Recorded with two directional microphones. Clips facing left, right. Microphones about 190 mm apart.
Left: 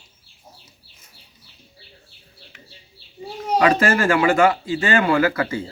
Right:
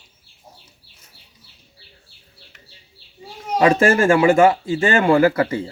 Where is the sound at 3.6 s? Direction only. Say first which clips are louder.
Right 3 dB; 30° right (ahead or behind).